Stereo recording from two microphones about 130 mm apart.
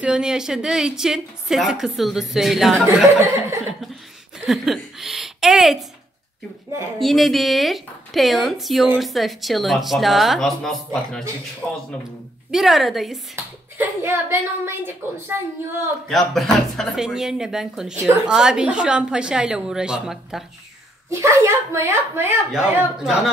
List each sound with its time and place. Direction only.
0.0 s a woman's voice: 5° right (ahead or behind)
4.5 s a woman's voice: centre (ahead or behind)
7.0 s a woman's voice: centre (ahead or behind)
12.4 s a woman's voice: centre (ahead or behind)
13.7 s a woman's voice: 15° right (ahead or behind)
16.1 s a woman's voice: centre (ahead or behind)
21.1 s speech: 20° right (ahead or behind)
22.5 s a woman's voice: 5° right (ahead or behind)